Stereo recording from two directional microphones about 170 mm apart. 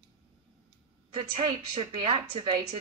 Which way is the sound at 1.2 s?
35° right (ahead or behind).